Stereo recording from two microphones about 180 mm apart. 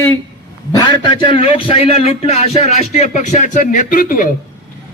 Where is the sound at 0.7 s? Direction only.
20° left (ahead or behind); by 4.3 s 50° left (ahead or behind).